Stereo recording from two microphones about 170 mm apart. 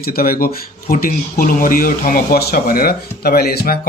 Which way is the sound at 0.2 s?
60° left (ahead or behind).